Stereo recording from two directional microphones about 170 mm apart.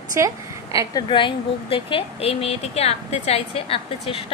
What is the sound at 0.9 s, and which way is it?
A woman's voice, 30° left (ahead or behind).